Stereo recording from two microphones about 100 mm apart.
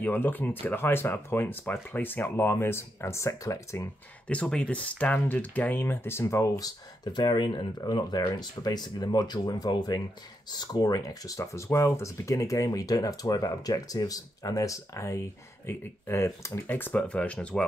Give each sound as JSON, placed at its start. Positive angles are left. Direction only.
{"t": 0.0, "sound": "speech", "side_deg": 20}
{"t": 4.3, "sound": "speech", "side_deg": 10}